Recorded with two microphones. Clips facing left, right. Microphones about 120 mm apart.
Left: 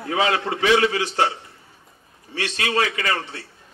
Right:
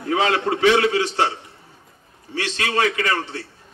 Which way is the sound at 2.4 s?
30° right (ahead or behind).